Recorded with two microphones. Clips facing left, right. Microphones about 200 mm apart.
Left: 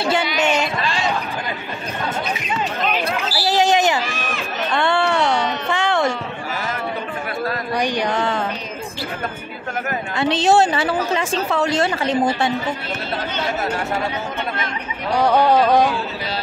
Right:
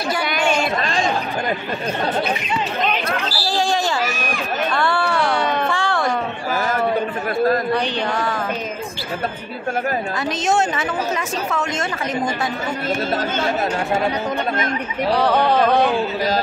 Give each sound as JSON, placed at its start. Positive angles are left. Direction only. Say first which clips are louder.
{"t": 0.0, "sound": "speech", "louder": "left 3 dB", "side_deg": 25}
{"t": 0.8, "sound": "chatter", "louder": "right 1 dB", "side_deg": -45}
{"t": 3.3, "sound": "a sound", "louder": "left 6 dB", "side_deg": 20}
{"t": 5.4, "sound": "a sound", "louder": "right 3 dB", "side_deg": -55}
{"t": 5.7, "sound": "music", "louder": "left 2 dB", "side_deg": 20}
{"t": 6.5, "sound": "chatter", "louder": "right 7 dB", "side_deg": -45}
{"t": 7.7, "sound": "a sound", "louder": "even", "side_deg": 15}
{"t": 10.1, "sound": "a woman's voice", "louder": "left 7 dB", "side_deg": 30}
{"t": 15.1, "sound": "speech", "louder": "left 3 dB", "side_deg": 10}